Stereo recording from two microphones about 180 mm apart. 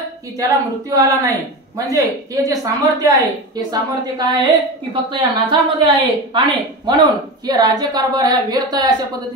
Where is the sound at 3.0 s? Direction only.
20° right (ahead or behind).